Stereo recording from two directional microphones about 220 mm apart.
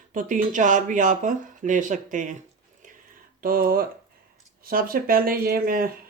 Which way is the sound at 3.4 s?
40° right (ahead or behind).